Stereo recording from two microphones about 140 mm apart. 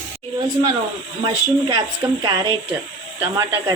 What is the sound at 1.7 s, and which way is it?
Speech, 30° right (ahead or behind).